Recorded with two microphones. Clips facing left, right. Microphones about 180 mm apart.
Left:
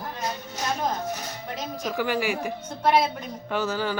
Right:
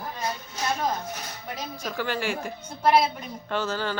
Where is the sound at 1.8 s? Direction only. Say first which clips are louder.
Left 3 dB; 15° left (ahead or behind).